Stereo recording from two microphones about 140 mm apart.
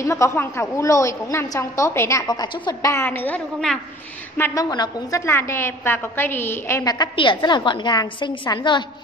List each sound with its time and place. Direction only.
0.0 s a woman's voice: 20° left (ahead or behind)
4.4 s a woman's voice: 25° left (ahead or behind)
5.2 s a woman's voice: 20° left (ahead or behind); by 8.8 s 35° left (ahead or behind)